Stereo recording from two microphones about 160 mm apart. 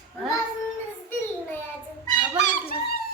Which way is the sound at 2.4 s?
55° left (ahead or behind).